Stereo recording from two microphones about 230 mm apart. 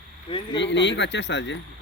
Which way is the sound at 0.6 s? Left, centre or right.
Left.